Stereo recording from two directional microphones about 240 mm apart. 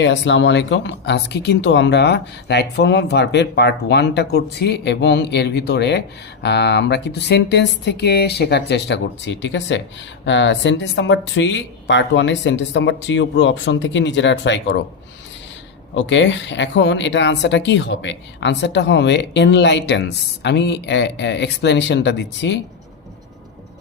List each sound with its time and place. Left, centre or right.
0.0 s speech: left
16.0 s speech: left